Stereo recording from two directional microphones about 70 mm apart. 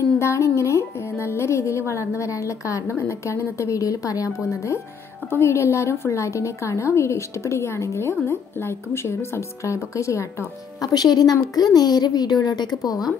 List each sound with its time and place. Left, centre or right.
0.2 s a woman's voice: left
4.5 s a woman's voice: left
10.8 s a woman's voice: left